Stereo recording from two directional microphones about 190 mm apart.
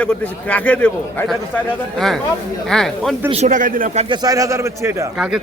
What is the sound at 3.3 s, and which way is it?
Speech, 40° right (ahead or behind).